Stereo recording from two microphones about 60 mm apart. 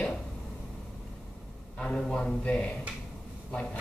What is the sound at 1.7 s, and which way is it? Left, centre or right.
Speech, centre.